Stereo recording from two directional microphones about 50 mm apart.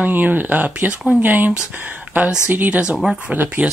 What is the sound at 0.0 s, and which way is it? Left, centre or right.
Speech, right.